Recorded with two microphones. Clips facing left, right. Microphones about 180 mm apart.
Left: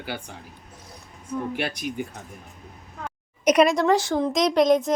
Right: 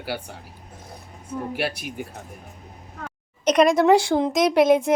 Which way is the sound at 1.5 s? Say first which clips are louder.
Right 1 dB; 5° right (ahead or behind).